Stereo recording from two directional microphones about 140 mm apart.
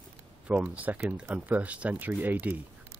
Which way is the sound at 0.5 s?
10° right (ahead or behind).